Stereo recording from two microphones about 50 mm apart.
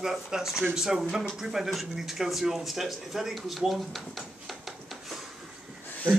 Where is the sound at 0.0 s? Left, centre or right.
Centre.